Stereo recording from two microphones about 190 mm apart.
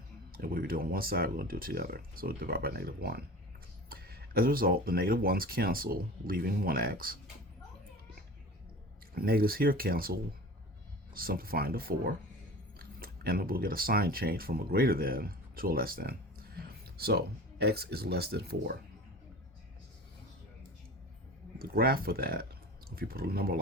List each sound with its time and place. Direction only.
0.3 s speech: 50° right (ahead or behind)
9.1 s speech: 50° right (ahead or behind)
21.6 s speech: 55° right (ahead or behind)